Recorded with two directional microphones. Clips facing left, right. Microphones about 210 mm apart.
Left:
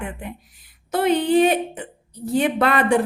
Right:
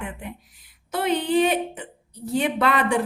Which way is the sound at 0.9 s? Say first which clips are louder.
Left 4 dB; 50° left (ahead or behind).